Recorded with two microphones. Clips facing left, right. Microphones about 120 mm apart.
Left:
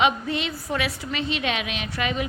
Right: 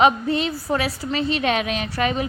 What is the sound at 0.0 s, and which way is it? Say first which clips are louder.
A woman's voice: right 5 dB; 40° right (ahead or behind).